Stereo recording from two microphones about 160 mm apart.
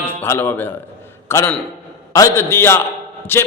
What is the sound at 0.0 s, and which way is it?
A man's voice, 10° left (ahead or behind).